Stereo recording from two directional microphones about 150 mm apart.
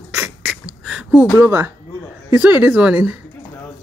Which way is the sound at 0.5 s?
5° right (ahead or behind).